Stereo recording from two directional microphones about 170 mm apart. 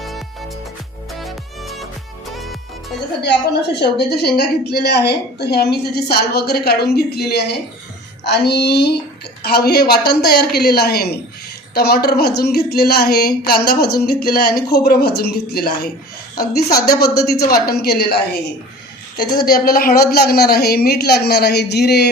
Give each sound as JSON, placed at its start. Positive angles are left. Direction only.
{"t": 1.2, "sound": "music", "side_deg": 0}
{"t": 3.2, "sound": "a woman's voice", "side_deg": 75}
{"t": 19.1, "sound": "a woman's voice", "side_deg": 25}
{"t": 19.5, "sound": "a woman's voice", "side_deg": 60}